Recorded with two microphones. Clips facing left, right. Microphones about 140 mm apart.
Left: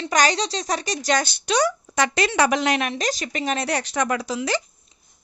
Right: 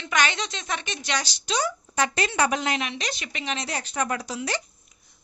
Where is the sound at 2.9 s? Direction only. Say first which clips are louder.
Left 7 dB; 45° left (ahead or behind).